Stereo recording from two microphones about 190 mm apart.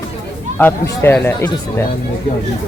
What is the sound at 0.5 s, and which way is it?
A man's voice, 10° left (ahead or behind).